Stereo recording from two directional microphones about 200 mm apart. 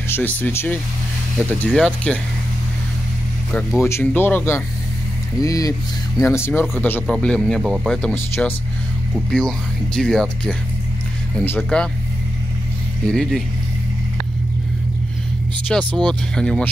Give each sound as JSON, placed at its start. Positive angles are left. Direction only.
{"t": 0.1, "sound": "speech", "side_deg": 10}
{"t": 1.7, "sound": "speech", "side_deg": 0}
{"t": 3.8, "sound": "speech", "side_deg": 10}
{"t": 13.0, "sound": "speech", "side_deg": 5}
{"t": 15.7, "sound": "speech", "side_deg": 5}